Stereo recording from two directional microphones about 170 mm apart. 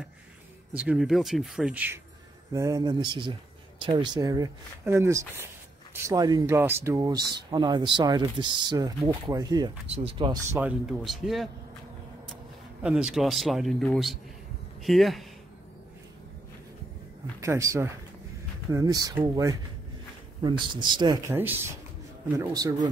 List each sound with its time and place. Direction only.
0.7 s speech: 5° right (ahead or behind)
2.5 s speech: 20° right (ahead or behind)
9.8 s speech: 35° right (ahead or behind); by 10.7 s 20° right (ahead or behind)
10.9 s speech: centre (ahead or behind)
12.8 s speech: 5° right (ahead or behind)
17.4 s speech: 20° right (ahead or behind)
21.3 s speech: 10° right (ahead or behind)